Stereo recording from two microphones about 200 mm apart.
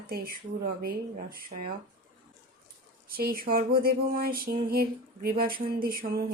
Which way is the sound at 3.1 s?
45° right (ahead or behind).